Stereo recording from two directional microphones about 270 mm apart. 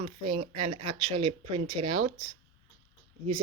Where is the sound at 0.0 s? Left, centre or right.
Right.